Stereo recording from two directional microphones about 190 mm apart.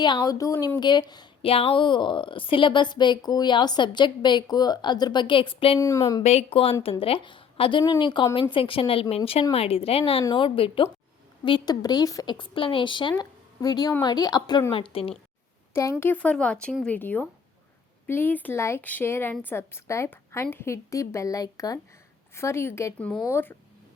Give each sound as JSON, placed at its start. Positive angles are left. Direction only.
{"t": 0.0, "sound": "speech", "side_deg": 20}
{"t": 15.7, "sound": "speech", "side_deg": 15}